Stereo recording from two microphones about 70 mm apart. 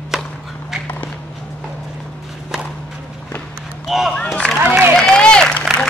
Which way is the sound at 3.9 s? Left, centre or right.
Centre.